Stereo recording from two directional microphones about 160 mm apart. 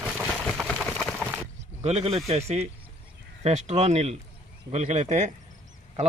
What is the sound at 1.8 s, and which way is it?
A man's voice, 40° right (ahead or behind).